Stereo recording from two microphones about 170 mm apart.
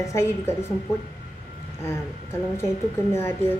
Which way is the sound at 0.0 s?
15° left (ahead or behind).